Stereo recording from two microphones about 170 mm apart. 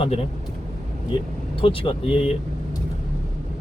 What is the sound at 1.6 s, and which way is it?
Speech, 30° left (ahead or behind).